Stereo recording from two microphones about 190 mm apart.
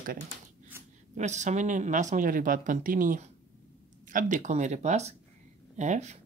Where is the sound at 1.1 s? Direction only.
40° right (ahead or behind).